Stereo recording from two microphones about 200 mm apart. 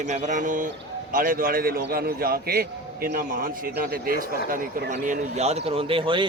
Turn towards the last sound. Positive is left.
turn(degrees=-25)  # may be behind; listen again after turning